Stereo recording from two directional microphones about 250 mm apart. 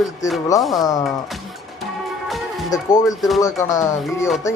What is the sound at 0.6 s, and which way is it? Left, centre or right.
Music, centre.